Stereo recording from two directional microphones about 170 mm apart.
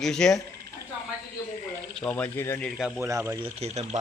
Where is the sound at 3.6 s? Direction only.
40° right (ahead or behind).